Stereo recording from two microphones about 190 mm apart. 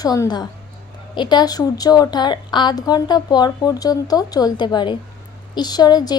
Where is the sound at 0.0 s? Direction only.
20° left (ahead or behind).